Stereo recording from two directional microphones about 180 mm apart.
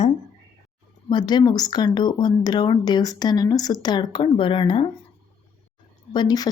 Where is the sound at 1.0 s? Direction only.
25° left (ahead or behind).